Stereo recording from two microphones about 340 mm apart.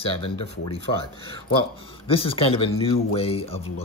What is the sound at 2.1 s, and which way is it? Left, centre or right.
Speech, centre.